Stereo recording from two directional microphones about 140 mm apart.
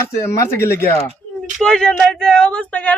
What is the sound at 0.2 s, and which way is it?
Speech, 20° left (ahead or behind).